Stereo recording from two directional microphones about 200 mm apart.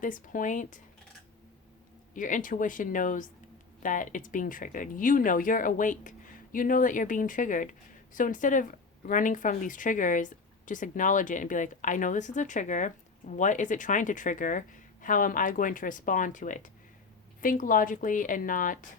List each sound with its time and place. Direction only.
0.0 s speech: 40° left (ahead or behind)
2.1 s speech: 40° left (ahead or behind)